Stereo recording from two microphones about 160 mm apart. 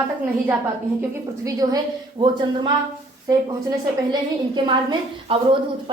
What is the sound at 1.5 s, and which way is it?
A woman's voice, 20° right (ahead or behind).